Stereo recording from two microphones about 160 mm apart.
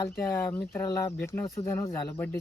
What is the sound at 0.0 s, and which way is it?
Speech, 15° left (ahead or behind).